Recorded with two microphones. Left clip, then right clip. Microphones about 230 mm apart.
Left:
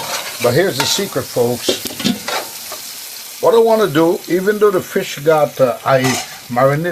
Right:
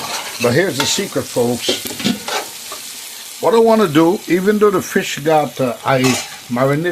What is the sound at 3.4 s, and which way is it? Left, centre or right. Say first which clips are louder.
Speech: left 1 dB; right.